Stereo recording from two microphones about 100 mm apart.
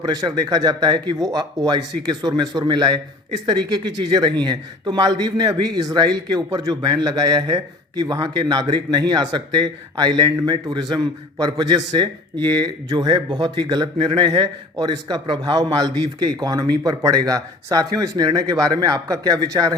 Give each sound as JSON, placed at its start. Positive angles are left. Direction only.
{"t": 0.0, "sound": "speech", "side_deg": -40}